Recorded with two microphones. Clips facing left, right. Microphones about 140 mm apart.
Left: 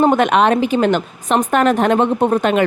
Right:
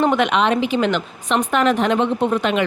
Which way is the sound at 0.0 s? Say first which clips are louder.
Left 4 dB; 45° left (ahead or behind).